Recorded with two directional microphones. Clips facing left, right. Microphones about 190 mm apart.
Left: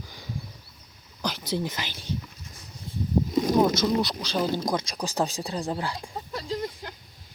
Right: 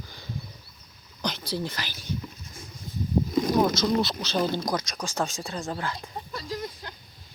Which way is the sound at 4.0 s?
Centre (ahead or behind).